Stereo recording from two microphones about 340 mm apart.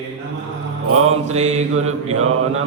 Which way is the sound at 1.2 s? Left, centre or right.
Centre.